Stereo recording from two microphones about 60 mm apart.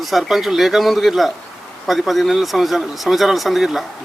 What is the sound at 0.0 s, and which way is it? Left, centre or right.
Speech, centre.